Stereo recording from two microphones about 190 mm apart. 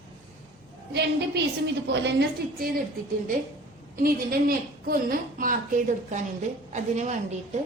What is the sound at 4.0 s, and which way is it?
A woman's voice, 50° right (ahead or behind).